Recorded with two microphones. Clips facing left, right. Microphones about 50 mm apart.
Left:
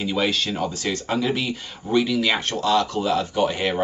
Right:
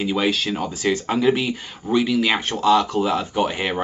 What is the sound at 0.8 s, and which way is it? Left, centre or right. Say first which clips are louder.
Speech: right 7 dB; right.